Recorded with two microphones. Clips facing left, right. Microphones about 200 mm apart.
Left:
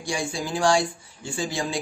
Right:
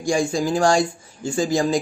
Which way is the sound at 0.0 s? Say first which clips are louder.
Right 8 dB; 45° right (ahead or behind).